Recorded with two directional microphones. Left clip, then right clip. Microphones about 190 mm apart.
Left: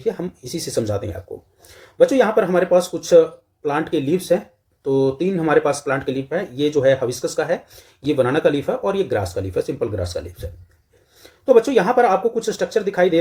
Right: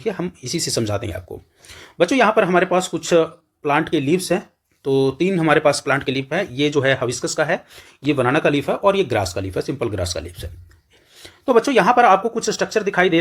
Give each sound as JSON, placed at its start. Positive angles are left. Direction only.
{"t": 0.0, "sound": "speech", "side_deg": -20}